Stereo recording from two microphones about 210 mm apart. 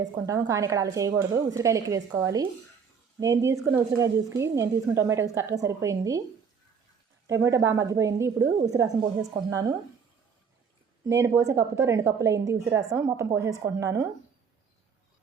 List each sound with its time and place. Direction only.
0.0 s a woman's voice: 15° right (ahead or behind)
7.3 s a woman's voice: 15° right (ahead or behind)
11.1 s a woman's voice: 15° right (ahead or behind)